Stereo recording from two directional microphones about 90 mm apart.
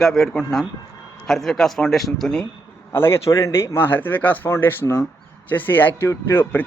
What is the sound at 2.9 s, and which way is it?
Speech, 25° left (ahead or behind).